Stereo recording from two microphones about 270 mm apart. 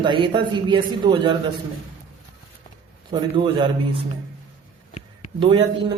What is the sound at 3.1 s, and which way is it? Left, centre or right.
Speech, centre.